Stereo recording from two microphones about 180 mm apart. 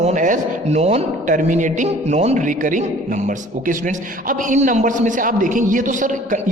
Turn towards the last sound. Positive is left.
turn(degrees=-45)  # may be behind; listen again after turning